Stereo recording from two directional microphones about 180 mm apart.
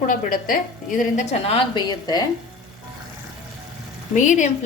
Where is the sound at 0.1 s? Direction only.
50° left (ahead or behind); by 2.2 s 25° left (ahead or behind).